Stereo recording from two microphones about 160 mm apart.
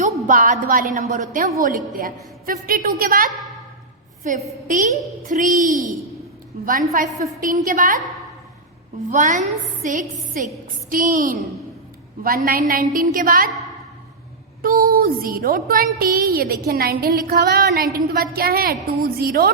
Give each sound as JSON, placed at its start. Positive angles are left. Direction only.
{"t": 0.3, "sound": "a child's voice", "side_deg": -55}
{"t": 7.0, "sound": "speech", "side_deg": -60}
{"t": 9.1, "sound": "a child's voice", "side_deg": -50}
{"t": 12.2, "sound": "speech", "side_deg": -65}
{"t": 14.6, "sound": "a woman's voice", "side_deg": -65}